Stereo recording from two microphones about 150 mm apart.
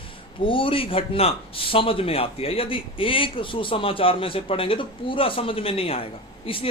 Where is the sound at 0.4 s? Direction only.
35° left (ahead or behind).